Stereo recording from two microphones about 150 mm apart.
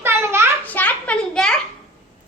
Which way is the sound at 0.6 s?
10° left (ahead or behind).